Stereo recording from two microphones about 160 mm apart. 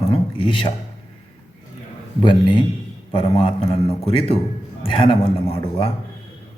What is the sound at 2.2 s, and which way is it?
A man's voice, 30° left (ahead or behind).